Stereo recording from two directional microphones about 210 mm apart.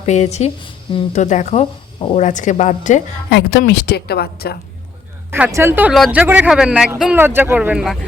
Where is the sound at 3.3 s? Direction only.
55° left (ahead or behind).